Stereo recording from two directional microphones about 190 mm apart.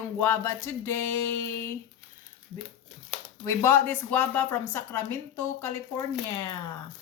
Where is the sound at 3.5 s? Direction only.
15° left (ahead or behind).